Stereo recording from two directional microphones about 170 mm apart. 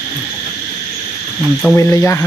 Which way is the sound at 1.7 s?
15° left (ahead or behind).